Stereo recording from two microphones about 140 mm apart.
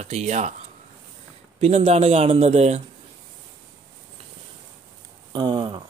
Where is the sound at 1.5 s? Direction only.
45° right (ahead or behind).